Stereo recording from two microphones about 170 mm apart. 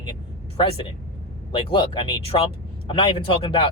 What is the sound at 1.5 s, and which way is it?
Speech, 30° left (ahead or behind).